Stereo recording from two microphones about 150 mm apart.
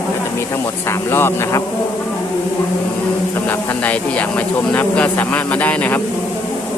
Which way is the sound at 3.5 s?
10° left (ahead or behind).